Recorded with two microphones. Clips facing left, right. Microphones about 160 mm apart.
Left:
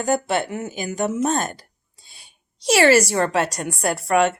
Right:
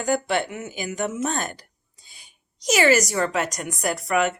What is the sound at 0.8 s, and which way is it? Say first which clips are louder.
Speech: left 3 dB; 25° left (ahead or behind).